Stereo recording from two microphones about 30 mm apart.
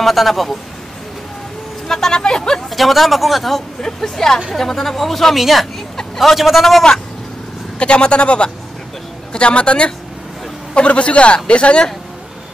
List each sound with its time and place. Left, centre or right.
0.0 s speech: centre
1.9 s speech: centre
2.7 s speech: centre
3.8 s speech: centre
7.8 s a man's voice: left